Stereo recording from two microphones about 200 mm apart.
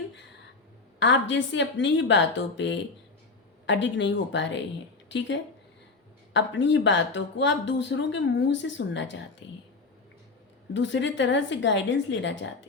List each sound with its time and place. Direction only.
0.9 s a woman's voice: 65° left (ahead or behind)
10.8 s speech: 65° left (ahead or behind)